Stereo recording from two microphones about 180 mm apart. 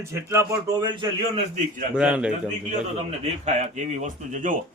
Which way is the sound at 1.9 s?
5° right (ahead or behind).